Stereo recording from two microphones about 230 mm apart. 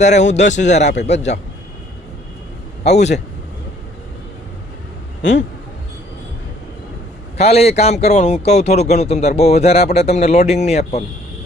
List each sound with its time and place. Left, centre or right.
0.0 s speech: left
0.9 s a man's voice: left
1.1 s a man's voice: left
2.8 s a man's voice: left
7.3 s a man's voice: left